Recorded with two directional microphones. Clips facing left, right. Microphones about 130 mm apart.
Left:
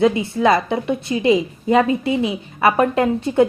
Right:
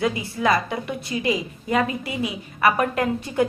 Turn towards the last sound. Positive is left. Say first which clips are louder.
# left 6 dB
turn(degrees=25)  # may be behind; listen again after turning